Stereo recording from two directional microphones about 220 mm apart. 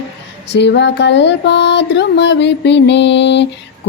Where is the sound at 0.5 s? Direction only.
50° left (ahead or behind).